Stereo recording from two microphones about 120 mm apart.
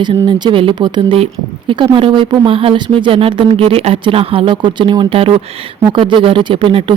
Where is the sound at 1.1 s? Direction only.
50° right (ahead or behind).